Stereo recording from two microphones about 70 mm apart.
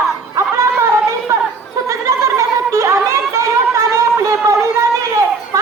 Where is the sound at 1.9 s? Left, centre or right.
Right.